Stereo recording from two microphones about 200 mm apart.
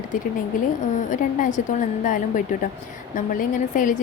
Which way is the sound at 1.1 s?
40° left (ahead or behind).